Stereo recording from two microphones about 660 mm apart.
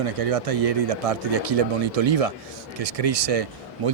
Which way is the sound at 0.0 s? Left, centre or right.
Right.